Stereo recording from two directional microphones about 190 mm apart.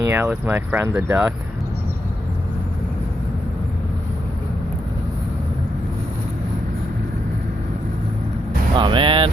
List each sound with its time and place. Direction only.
0.0 s speech: 15° right (ahead or behind)
8.7 s speech: 25° right (ahead or behind)